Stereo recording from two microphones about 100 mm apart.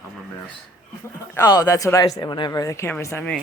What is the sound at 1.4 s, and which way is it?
Speech, 35° left (ahead or behind).